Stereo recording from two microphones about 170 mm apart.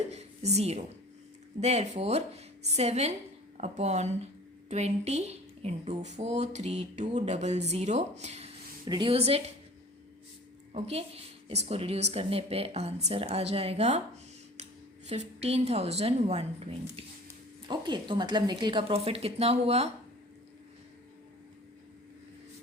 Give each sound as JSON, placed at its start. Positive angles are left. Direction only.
{"t": 0.1, "sound": "a sound", "side_deg": -40}
{"t": 1.6, "sound": "speech", "side_deg": -40}
{"t": 10.8, "sound": "speech", "side_deg": -35}
{"t": 17.7, "sound": "speech", "side_deg": -25}